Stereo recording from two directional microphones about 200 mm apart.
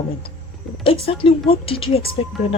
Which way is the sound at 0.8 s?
25° left (ahead or behind).